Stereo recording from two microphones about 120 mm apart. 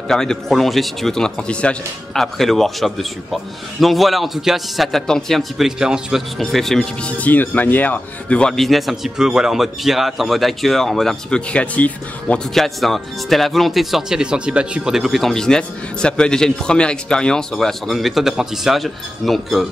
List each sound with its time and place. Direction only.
0.1 s a man's voice: 5° left (ahead or behind)